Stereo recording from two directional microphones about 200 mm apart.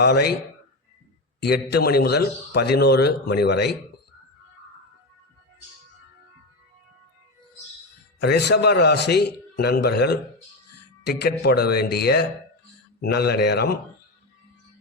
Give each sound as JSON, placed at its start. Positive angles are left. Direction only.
{"t": 0.0, "sound": "speech", "side_deg": 55}
{"t": 1.4, "sound": "a man's voice", "side_deg": 55}
{"t": 8.2, "sound": "speech", "side_deg": 55}